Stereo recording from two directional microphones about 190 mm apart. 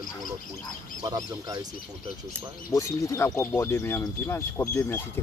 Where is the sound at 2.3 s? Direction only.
15° left (ahead or behind).